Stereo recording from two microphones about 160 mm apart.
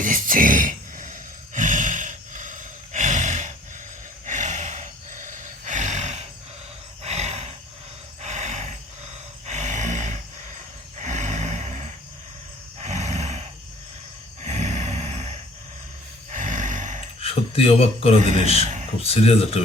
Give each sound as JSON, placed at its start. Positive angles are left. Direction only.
{"t": 0.0, "sound": "a sound", "side_deg": -55}
{"t": 7.0, "sound": "roar", "side_deg": -45}
{"t": 8.2, "sound": "a sound", "side_deg": -45}
{"t": 11.0, "sound": "vehicle", "side_deg": -45}
{"t": 12.8, "sound": "roar", "side_deg": -45}
{"t": 14.4, "sound": "a sound", "side_deg": -45}
{"t": 16.3, "sound": "roar", "side_deg": -50}
{"t": 17.2, "sound": "speech", "side_deg": 40}
{"t": 18.2, "sound": "a man's voice", "side_deg": -50}
{"t": 19.0, "sound": "speech", "side_deg": 40}